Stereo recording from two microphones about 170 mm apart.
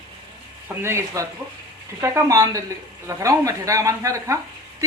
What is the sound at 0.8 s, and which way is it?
A woman's voice, 15° right (ahead or behind).